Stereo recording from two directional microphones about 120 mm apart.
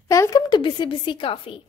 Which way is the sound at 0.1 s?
25° left (ahead or behind).